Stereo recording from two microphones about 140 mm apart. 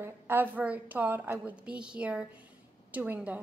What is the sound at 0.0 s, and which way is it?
A woman's voice, 15° right (ahead or behind).